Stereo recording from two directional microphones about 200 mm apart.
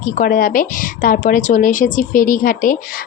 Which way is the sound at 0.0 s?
45° left (ahead or behind).